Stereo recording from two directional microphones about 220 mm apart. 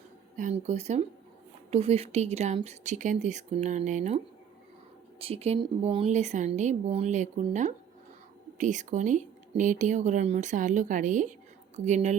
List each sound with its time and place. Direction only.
0.3 s a woman's voice: 30° right (ahead or behind)
5.2 s a woman's voice: 25° right (ahead or behind)